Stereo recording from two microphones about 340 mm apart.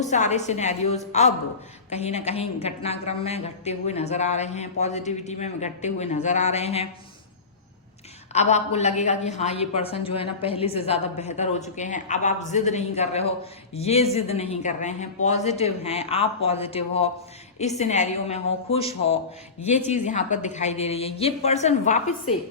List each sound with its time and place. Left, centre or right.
0.0 s a woman's voice: left
8.3 s a woman's voice: centre